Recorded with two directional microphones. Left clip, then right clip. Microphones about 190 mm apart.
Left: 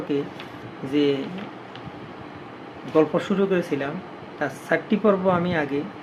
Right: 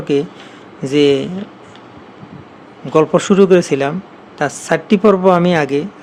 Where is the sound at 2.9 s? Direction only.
60° right (ahead or behind).